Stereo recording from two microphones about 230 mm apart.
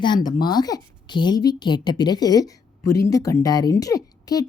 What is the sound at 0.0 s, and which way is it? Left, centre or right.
A woman's voice, centre.